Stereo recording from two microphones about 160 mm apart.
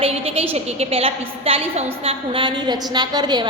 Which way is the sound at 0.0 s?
35° right (ahead or behind).